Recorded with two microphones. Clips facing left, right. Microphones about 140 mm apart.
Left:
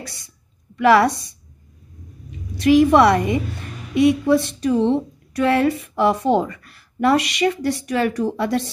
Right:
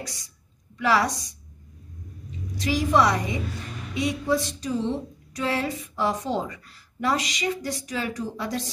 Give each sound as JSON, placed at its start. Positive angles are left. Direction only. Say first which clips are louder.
{"t": 0.7, "sound": "speech", "louder": "left 8 dB", "side_deg": 60}
{"t": 2.5, "sound": "speech", "louder": "left 9 dB", "side_deg": 60}